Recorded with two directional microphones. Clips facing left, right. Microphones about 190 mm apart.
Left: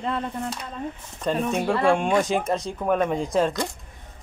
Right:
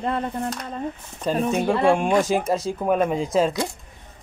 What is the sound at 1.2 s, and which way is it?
Speech, 5° right (ahead or behind).